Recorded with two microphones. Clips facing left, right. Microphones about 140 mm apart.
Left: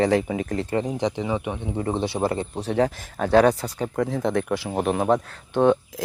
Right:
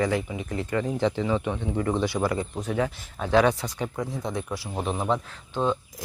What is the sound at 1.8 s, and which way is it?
Speech, 25° left (ahead or behind).